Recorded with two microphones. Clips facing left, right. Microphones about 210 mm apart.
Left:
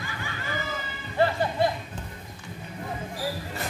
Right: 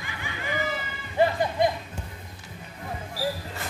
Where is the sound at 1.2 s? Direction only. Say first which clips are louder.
Right 1 dB; 15° right (ahead or behind).